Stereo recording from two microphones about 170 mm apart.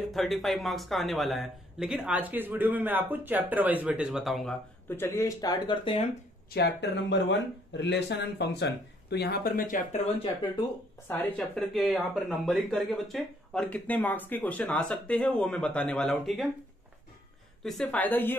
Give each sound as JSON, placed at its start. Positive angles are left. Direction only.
{"t": 0.1, "sound": "speech", "side_deg": 0}
{"t": 4.8, "sound": "speech", "side_deg": 15}
{"t": 6.5, "sound": "speech", "side_deg": 90}
{"t": 11.1, "sound": "speech", "side_deg": 10}
{"t": 17.6, "sound": "speech", "side_deg": 5}